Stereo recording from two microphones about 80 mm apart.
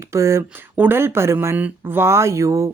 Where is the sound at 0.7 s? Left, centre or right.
Right.